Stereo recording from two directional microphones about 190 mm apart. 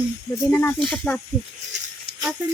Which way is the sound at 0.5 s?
10° left (ahead or behind).